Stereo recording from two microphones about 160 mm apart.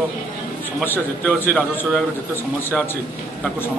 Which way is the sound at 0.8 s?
10° left (ahead or behind).